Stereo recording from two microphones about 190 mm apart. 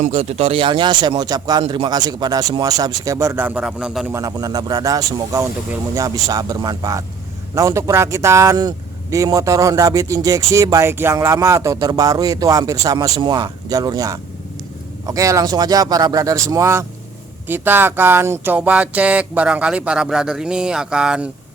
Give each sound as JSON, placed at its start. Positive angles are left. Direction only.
{"t": 0.0, "sound": "speech", "side_deg": -30}
{"t": 4.1, "sound": "speech", "side_deg": -15}